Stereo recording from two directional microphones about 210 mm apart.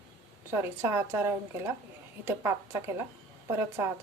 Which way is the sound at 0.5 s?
10° right (ahead or behind).